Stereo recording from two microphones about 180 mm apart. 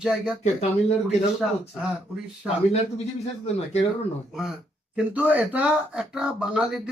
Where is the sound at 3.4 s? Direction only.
35° left (ahead or behind).